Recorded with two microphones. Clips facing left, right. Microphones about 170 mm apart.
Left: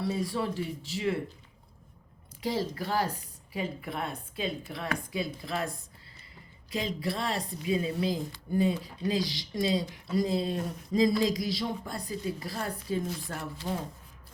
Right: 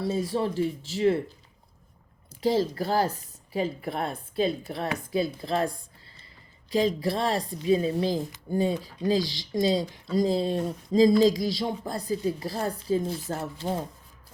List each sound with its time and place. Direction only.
0.3 s speech: 35° right (ahead or behind)
2.4 s a woman's voice: 30° right (ahead or behind)
6.7 s speech: 35° right (ahead or behind)